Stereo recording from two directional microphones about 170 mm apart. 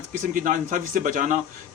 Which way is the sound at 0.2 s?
50° right (ahead or behind).